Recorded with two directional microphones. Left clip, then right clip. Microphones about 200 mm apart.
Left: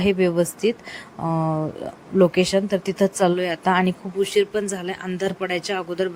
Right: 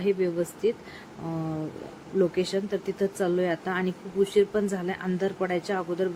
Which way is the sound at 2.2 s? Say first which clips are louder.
Left 8 dB; 45° left (ahead or behind).